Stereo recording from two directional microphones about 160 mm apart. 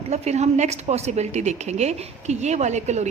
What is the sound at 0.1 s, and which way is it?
A woman's voice, 45° right (ahead or behind).